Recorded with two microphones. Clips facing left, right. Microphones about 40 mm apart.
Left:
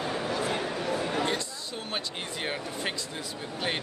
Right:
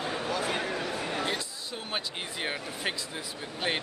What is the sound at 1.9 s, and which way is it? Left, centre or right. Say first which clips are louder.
Speech: even; centre.